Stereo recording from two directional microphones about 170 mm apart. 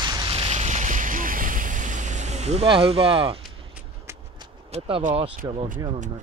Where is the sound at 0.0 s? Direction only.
25° right (ahead or behind).